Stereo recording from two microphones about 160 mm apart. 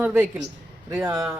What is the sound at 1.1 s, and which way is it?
Speech, 20° right (ahead or behind).